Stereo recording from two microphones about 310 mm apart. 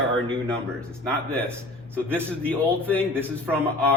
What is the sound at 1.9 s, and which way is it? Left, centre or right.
Speech, centre.